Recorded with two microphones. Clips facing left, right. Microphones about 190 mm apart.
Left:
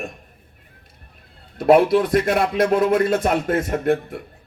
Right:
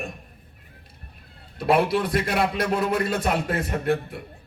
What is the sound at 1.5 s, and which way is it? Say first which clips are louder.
A man's voice: left 7 dB; 50° left (ahead or behind).